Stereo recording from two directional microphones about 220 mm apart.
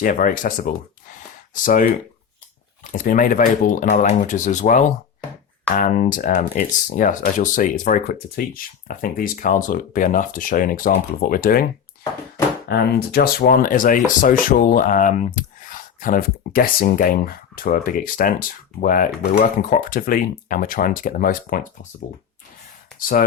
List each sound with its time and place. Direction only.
0.0 s speech: 35° left (ahead or behind)
2.9 s speech: 35° left (ahead or behind)
12.6 s speech: 45° left (ahead or behind)
23.0 s speech: 40° left (ahead or behind)